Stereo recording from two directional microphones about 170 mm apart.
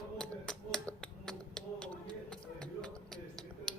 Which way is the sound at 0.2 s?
5° left (ahead or behind).